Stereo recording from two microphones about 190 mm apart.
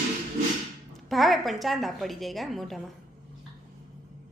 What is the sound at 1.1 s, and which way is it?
A woman's voice, centre (ahead or behind).